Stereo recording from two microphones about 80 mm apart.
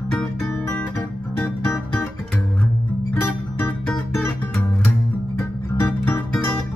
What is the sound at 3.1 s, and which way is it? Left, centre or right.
Music, left.